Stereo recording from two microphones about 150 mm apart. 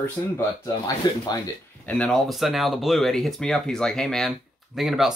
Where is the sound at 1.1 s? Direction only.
25° left (ahead or behind).